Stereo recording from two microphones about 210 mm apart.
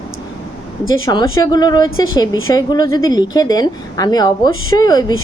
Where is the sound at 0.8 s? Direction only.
70° left (ahead or behind).